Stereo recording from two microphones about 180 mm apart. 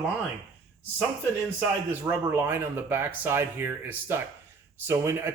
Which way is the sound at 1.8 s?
10° right (ahead or behind).